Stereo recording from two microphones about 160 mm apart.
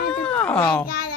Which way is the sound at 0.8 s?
70° left (ahead or behind).